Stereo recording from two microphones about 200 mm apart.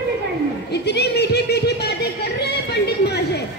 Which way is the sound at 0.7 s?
55° left (ahead or behind).